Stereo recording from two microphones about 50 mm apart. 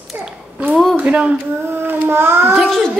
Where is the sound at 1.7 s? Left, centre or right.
Right.